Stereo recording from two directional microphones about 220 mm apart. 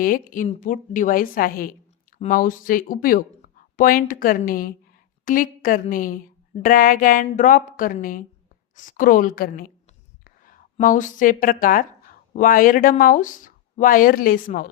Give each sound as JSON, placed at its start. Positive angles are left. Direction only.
{"t": 0.0, "sound": "a woman's voice", "side_deg": 40}